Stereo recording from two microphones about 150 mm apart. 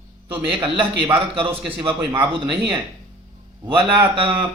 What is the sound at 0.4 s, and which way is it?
A man's voice, 35° right (ahead or behind).